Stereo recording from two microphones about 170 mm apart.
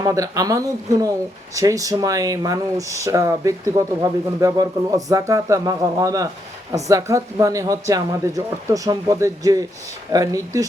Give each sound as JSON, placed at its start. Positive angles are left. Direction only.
{"t": 0.0, "sound": "speech", "side_deg": -20}